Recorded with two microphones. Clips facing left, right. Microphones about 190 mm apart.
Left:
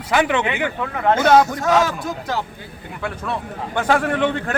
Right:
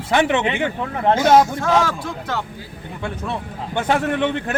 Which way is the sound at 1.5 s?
15° left (ahead or behind).